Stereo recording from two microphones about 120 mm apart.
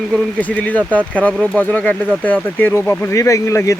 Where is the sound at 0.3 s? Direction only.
10° left (ahead or behind).